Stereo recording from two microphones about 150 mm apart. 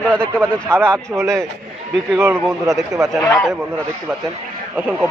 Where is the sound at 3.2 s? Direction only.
15° left (ahead or behind).